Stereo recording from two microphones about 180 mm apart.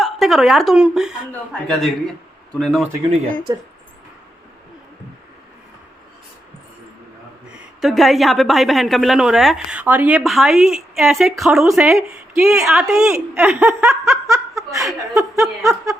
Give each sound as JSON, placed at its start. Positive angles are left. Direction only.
{"t": 0.0, "sound": "a woman's voice", "side_deg": 0}
{"t": 3.5, "sound": "speech", "side_deg": -20}
{"t": 7.5, "sound": "a woman's voice", "side_deg": -5}
{"t": 11.9, "sound": "speech", "side_deg": -15}
{"t": 12.7, "sound": "a woman's voice", "side_deg": 0}